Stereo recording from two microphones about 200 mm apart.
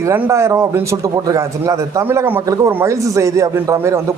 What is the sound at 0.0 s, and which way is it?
Speech, 15° right (ahead or behind).